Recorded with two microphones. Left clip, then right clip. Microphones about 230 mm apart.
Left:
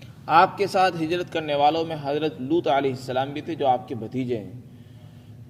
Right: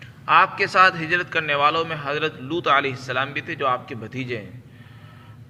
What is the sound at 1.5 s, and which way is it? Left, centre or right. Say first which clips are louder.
A man's voice: left 1 dB; left.